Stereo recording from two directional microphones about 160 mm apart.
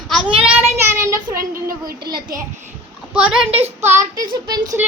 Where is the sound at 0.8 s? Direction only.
15° right (ahead or behind).